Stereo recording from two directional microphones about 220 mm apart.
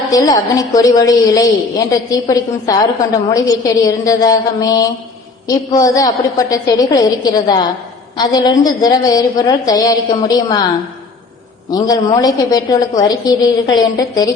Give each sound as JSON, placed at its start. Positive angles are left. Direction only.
{"t": 0.1, "sound": "a woman's voice", "side_deg": 15}
{"t": 11.7, "sound": "a woman's voice", "side_deg": 15}